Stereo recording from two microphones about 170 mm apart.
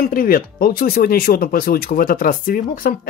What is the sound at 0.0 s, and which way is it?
Speech, 55° left (ahead or behind).